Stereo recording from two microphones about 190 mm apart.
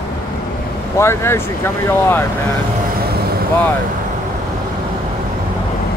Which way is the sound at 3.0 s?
55° right (ahead or behind).